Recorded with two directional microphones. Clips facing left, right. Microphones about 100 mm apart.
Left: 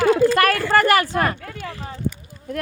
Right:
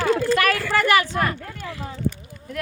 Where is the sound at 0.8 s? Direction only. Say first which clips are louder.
Left 2 dB; 45° left (ahead or behind).